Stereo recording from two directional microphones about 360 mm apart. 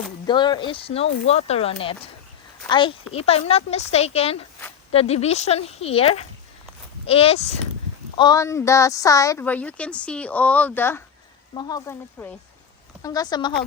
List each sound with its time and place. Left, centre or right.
0.3 s a woman's voice: centre